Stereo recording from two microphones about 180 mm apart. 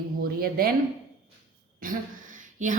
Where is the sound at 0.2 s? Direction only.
55° right (ahead or behind).